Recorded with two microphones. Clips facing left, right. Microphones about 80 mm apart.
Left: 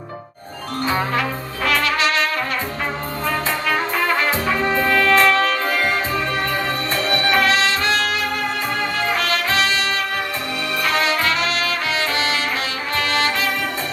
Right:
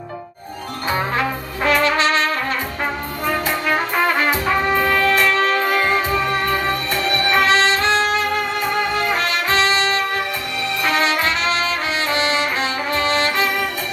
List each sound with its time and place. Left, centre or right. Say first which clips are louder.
1.6 s brass instrument: right 3 dB; right
3.7 s brass instrument: right 2 dB; right
4.8 s music: left 1 dB; right
7.0 s music: left 1 dB; left
7.3 s music: right 2 dB; right